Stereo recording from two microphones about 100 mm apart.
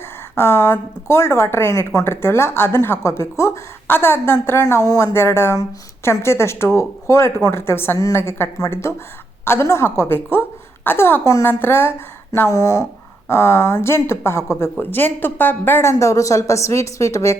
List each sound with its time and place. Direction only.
0.3 s a woman's voice: 25° left (ahead or behind)